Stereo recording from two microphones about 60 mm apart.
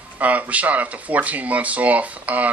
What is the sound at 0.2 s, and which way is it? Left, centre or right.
Speech, right.